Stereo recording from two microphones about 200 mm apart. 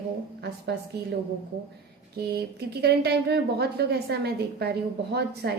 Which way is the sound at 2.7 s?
55° right (ahead or behind).